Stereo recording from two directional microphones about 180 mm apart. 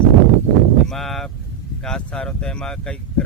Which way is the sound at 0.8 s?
Centre (ahead or behind).